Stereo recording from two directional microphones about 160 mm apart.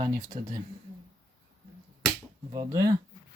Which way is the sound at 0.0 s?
20° right (ahead or behind).